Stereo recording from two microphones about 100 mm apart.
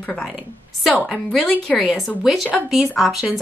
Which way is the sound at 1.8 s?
Centre (ahead or behind).